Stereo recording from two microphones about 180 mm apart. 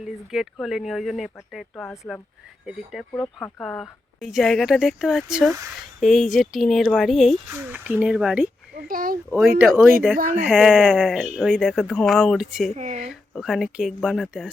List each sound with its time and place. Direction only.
0.0 s speech: centre (ahead or behind)
8.7 s speech: 55° right (ahead or behind)
9.6 s speech: 10° right (ahead or behind)
10.2 s speech: 45° right (ahead or behind)
10.4 s speech: centre (ahead or behind)
12.7 s speech: 40° right (ahead or behind)
13.1 s speech: centre (ahead or behind)